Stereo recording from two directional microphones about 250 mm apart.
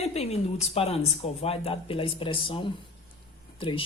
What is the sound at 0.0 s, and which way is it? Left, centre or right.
A woman's voice, left.